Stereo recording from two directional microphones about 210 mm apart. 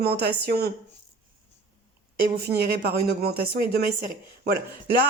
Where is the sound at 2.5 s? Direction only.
50° right (ahead or behind).